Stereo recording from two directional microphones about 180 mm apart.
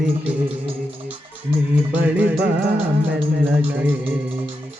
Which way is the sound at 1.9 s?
10° right (ahead or behind).